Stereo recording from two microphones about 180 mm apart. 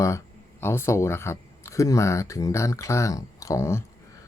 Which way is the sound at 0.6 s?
15° left (ahead or behind).